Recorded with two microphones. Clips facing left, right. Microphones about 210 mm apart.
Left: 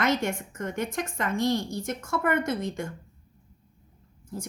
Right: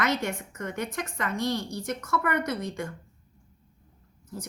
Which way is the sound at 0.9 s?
45° left (ahead or behind).